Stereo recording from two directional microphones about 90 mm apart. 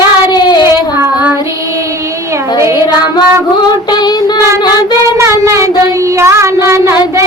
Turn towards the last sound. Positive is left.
turn(degrees=-30)  # may be behind; listen again after turning